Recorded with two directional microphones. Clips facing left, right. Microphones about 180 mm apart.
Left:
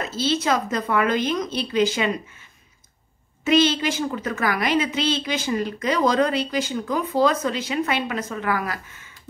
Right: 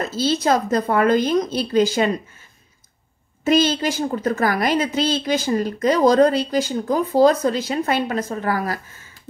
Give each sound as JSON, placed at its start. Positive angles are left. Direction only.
{"t": 0.0, "sound": "a woman's voice", "side_deg": -40}
{"t": 3.4, "sound": "a woman's voice", "side_deg": -40}